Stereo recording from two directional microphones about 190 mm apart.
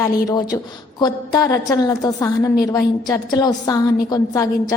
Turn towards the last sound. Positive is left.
turn(degrees=20)  # may be behind; listen again after turning